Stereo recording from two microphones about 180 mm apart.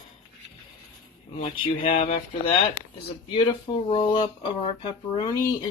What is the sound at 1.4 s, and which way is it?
Speech, 30° left (ahead or behind).